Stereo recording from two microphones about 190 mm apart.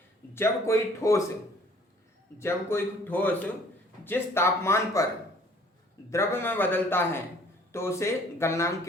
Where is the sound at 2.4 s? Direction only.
15° left (ahead or behind).